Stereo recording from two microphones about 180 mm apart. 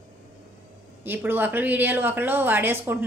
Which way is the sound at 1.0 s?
10° right (ahead or behind).